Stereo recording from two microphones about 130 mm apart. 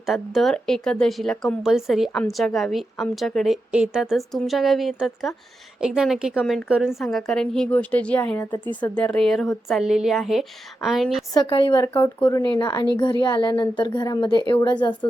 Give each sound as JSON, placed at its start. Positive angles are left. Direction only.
{"t": 0.0, "sound": "speech", "side_deg": 0}
{"t": 6.4, "sound": "speech", "side_deg": 5}
{"t": 6.7, "sound": "a woman's voice", "side_deg": -5}
{"t": 11.3, "sound": "a woman's voice", "side_deg": 40}